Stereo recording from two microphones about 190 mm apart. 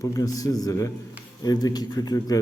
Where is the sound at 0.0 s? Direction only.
20° left (ahead or behind).